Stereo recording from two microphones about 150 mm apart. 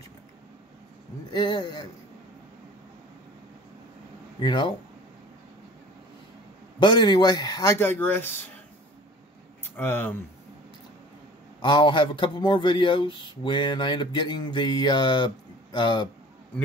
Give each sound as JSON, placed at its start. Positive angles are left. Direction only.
{"t": 1.3, "sound": "speech", "side_deg": 25}
{"t": 4.4, "sound": "speech", "side_deg": 30}
{"t": 6.8, "sound": "speech", "side_deg": 30}
{"t": 9.8, "sound": "speech", "side_deg": 15}
{"t": 11.6, "sound": "speech", "side_deg": 30}